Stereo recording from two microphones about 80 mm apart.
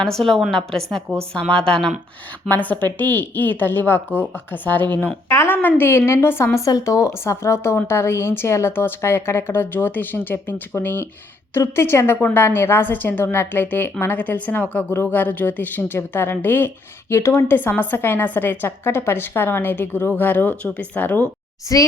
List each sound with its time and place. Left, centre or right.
0.0 s a woman's voice: centre
2.5 s a woman's voice: left
5.3 s a woman's voice: left
6.7 s a woman's voice: left
17.6 s a woman's voice: left
21.7 s a child's voice: left